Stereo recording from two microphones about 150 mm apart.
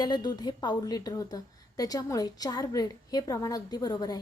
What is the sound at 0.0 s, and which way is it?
A woman's voice, 30° left (ahead or behind).